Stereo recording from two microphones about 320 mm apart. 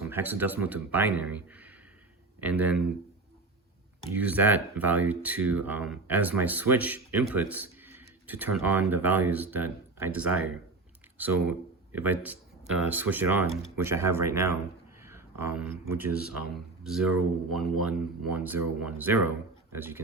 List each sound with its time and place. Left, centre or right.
0.0 s speech: centre
4.0 s speech: centre